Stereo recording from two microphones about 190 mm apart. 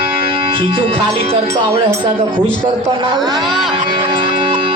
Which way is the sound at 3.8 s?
30° right (ahead or behind).